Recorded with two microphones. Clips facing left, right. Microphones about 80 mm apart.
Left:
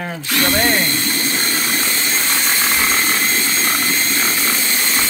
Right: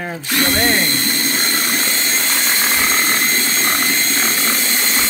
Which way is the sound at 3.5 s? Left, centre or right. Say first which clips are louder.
Right 1 dB; right.